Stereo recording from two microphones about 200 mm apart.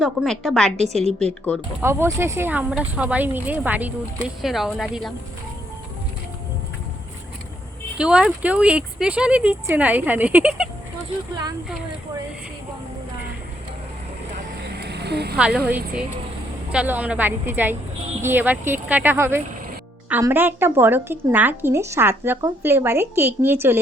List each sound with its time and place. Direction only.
0.0 s speech: centre (ahead or behind)
0.8 s a woman's voice: 30° right (ahead or behind)
1.8 s speech: 15° right (ahead or behind)
7.9 s speech: 5° right (ahead or behind)
14.8 s a sound: 55° right (ahead or behind)
15.4 s speech: 5° right (ahead or behind)
16.7 s speech: 10° right (ahead or behind)